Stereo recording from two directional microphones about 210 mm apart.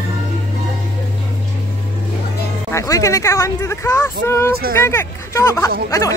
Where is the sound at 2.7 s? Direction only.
15° left (ahead or behind).